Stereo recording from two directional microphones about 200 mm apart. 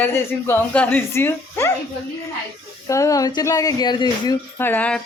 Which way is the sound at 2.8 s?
15° left (ahead or behind).